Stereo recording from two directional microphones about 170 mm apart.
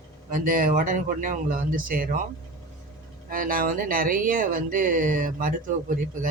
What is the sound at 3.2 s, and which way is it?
Speech, 55° right (ahead or behind).